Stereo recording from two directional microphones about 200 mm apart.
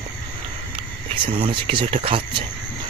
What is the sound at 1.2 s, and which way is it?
Speech, 25° right (ahead or behind).